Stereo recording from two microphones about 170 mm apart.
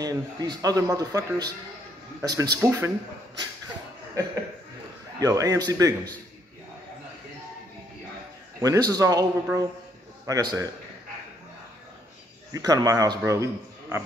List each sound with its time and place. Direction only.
0.0 s speech: 20° right (ahead or behind)
5.2 s speech: 20° right (ahead or behind)
8.5 s speech: 20° right (ahead or behind)
12.5 s speech: 20° right (ahead or behind)